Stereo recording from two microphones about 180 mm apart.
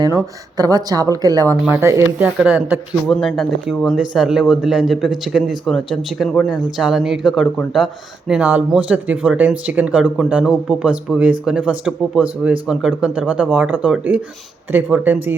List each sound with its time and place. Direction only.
0.0 s speech: 20° right (ahead or behind)